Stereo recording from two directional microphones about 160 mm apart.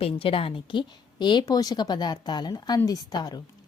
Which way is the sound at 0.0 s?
35° left (ahead or behind).